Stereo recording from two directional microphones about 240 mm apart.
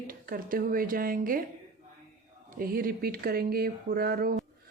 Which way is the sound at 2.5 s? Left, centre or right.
Right.